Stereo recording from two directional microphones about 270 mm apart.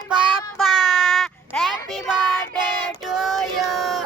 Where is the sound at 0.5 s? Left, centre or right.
Centre.